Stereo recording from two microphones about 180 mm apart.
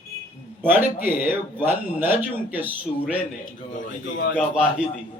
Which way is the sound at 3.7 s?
45° left (ahead or behind).